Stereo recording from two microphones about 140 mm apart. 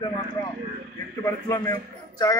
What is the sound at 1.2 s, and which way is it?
Speech, 25° left (ahead or behind).